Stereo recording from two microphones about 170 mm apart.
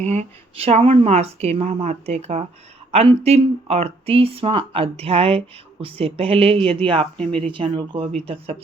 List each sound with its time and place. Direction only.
0.0 s speech: 40° right (ahead or behind)